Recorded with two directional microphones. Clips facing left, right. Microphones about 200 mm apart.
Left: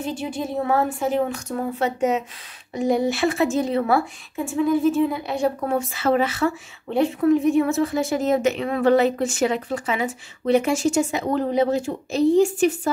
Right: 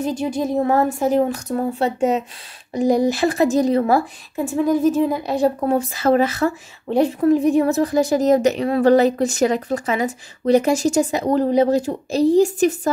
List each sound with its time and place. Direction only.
0.0 s a woman's voice: 40° right (ahead or behind)